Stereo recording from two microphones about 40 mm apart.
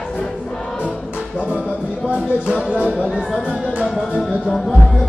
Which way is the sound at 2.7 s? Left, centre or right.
Right.